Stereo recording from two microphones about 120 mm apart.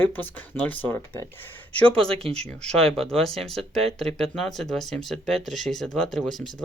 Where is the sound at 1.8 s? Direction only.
10° left (ahead or behind).